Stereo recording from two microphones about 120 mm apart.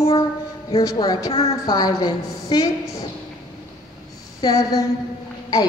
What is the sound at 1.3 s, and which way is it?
Speech, 60° left (ahead or behind).